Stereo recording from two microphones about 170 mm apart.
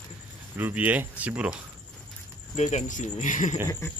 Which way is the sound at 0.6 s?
10° right (ahead or behind).